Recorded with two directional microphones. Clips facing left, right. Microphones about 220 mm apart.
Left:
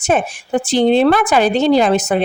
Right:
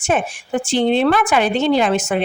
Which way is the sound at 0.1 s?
40° left (ahead or behind).